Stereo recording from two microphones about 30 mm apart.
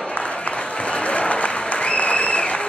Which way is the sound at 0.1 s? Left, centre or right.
Left.